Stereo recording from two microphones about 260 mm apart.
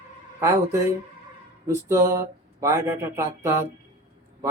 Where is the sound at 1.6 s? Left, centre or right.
Centre.